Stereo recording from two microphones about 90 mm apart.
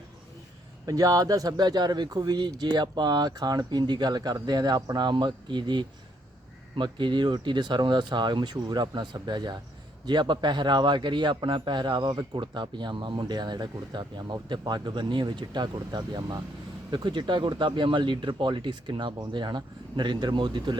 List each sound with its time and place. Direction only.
0.9 s a man's voice: 40° right (ahead or behind); by 20.7 s 60° right (ahead or behind)